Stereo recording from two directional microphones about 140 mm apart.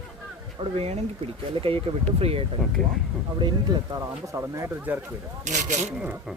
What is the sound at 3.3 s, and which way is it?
Speech, 30° right (ahead or behind).